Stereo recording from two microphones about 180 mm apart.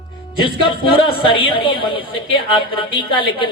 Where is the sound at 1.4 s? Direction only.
30° left (ahead or behind).